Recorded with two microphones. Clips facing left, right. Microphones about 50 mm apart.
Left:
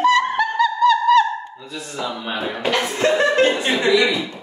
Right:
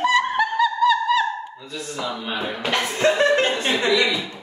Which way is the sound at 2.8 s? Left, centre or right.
Left.